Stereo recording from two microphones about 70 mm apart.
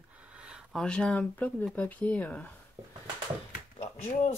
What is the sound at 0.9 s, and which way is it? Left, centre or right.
Speech, centre.